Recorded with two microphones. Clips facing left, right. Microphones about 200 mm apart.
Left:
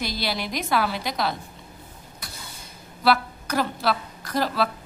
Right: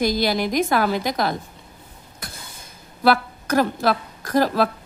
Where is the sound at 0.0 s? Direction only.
45° right (ahead or behind).